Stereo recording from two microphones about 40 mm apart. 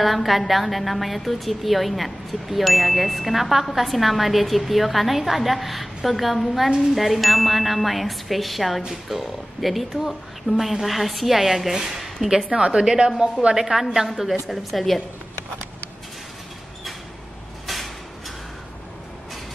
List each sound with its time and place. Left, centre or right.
0.0 s a woman's voice: centre
6.7 s a woman's voice: centre
7.0 s a woman's voice: centre
12.4 s a woman's voice: right
13.6 s a woman's voice: centre
17.6 s a sound: centre